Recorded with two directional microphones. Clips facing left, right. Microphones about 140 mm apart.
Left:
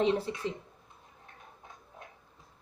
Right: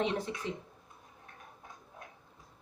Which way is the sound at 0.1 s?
30° left (ahead or behind).